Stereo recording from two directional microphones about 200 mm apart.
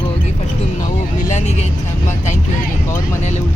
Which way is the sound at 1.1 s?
40° left (ahead or behind).